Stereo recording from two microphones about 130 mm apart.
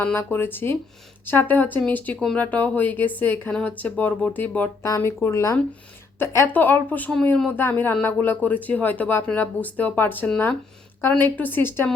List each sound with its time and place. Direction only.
0.2 s speech: 15° left (ahead or behind)
4.8 s speech: 20° left (ahead or behind)